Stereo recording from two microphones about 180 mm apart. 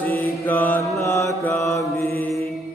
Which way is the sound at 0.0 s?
10° left (ahead or behind).